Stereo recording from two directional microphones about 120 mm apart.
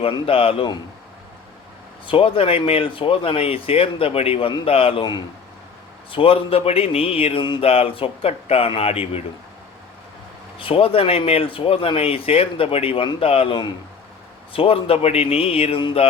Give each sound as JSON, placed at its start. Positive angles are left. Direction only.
{"t": 0.0, "sound": "speech", "side_deg": 50}
{"t": 2.0, "sound": "speech", "side_deg": 50}
{"t": 6.1, "sound": "speech", "side_deg": 50}
{"t": 7.6, "sound": "speech", "side_deg": 55}
{"t": 10.6, "sound": "speech", "side_deg": 50}